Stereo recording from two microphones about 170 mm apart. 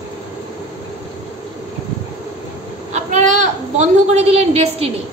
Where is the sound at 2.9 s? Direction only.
45° right (ahead or behind).